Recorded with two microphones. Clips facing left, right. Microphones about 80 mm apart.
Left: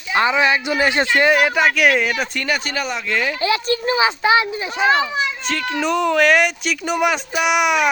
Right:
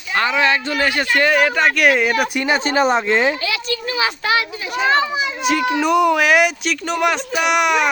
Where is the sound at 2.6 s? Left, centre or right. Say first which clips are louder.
Right 8 dB; right.